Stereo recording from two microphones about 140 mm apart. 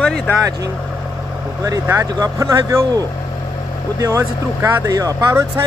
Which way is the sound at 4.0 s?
20° right (ahead or behind).